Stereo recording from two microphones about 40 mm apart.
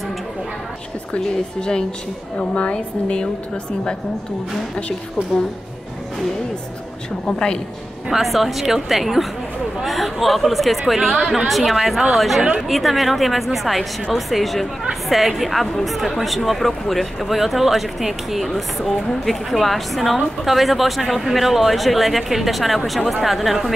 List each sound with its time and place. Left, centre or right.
1.6 s a woman's voice: centre
2.3 s a woman's voice: left
7.2 s a woman's voice: left
8.1 s a woman's voice: centre